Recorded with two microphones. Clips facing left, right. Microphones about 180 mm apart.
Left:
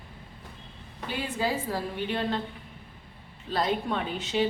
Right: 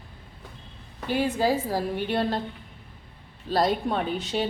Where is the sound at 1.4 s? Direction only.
40° right (ahead or behind).